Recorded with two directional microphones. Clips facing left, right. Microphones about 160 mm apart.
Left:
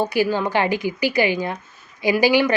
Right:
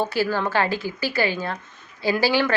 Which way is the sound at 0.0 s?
15° left (ahead or behind).